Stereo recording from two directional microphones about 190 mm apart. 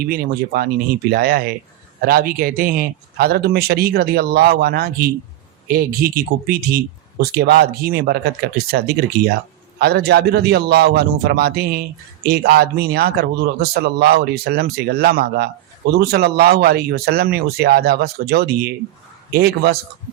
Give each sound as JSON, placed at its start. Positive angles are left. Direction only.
{"t": 0.0, "sound": "a man's voice", "side_deg": -50}